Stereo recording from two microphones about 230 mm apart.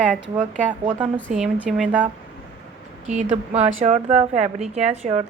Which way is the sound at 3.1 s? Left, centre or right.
Right.